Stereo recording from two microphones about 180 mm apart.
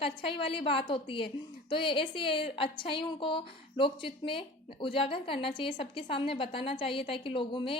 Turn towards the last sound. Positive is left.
turn(degrees=30)  # may be behind; listen again after turning